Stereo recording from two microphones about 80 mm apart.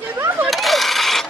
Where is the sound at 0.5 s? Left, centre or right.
Centre.